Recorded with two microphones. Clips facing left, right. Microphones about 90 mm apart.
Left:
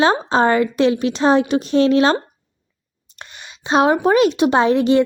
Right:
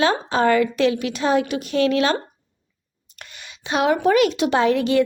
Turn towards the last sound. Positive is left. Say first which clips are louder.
# left 4 dB
turn(degrees=25)  # may be behind; listen again after turning